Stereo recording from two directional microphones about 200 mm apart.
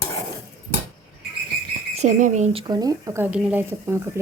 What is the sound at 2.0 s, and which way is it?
Speech, 40° right (ahead or behind).